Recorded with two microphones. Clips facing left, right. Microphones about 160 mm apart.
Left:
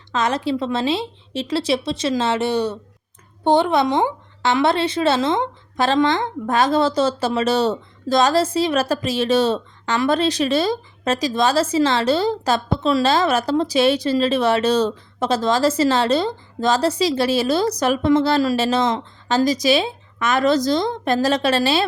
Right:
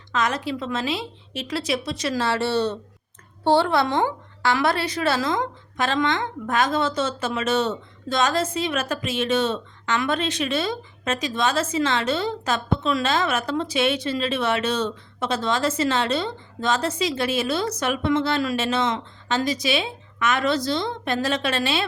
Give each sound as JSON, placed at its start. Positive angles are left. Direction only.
{"t": 0.1, "sound": "a woman's voice", "side_deg": 30}